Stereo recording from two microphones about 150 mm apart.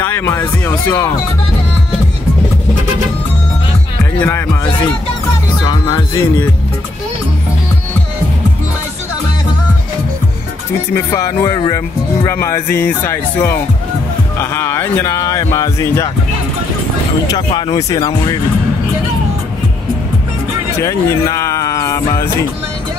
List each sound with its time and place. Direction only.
0.0 s speech: 15° left (ahead or behind)
4.0 s music: 15° left (ahead or behind)
5.7 s speech: 25° left (ahead or behind)
11.1 s speech: 25° left (ahead or behind)
17.3 s speech: 30° left (ahead or behind)
20.8 s speech: 20° left (ahead or behind)